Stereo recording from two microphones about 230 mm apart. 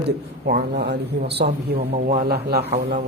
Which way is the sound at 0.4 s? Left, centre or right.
Right.